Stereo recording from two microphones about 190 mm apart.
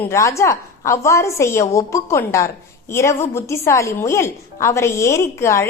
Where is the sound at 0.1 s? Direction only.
15° left (ahead or behind).